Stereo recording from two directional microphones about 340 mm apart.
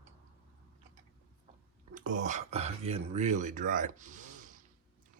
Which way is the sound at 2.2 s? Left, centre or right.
Right.